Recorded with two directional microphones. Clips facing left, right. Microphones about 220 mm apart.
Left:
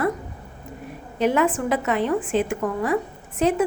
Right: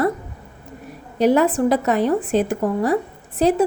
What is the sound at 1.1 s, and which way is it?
A woman's voice, 35° right (ahead or behind).